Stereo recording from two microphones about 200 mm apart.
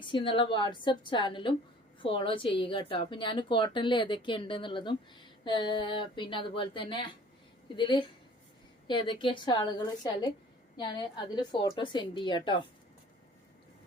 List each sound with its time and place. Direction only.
0.0 s a woman's voice: 25° left (ahead or behind)